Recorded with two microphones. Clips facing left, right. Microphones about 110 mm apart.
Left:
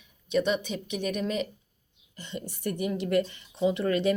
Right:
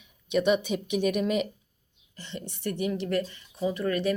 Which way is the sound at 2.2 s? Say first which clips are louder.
Left 1 dB; 10° left (ahead or behind).